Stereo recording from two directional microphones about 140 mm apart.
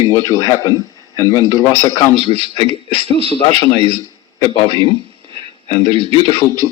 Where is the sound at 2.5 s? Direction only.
40° left (ahead or behind).